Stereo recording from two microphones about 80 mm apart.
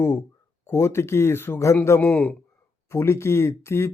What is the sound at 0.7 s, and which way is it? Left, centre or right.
Speech, left.